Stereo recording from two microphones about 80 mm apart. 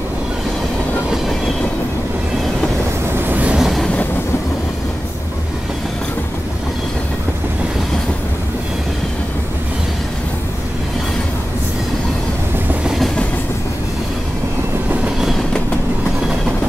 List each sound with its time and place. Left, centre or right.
3.2 s train: right
3.5 s train: centre
12.8 s train: centre
15.0 s train: centre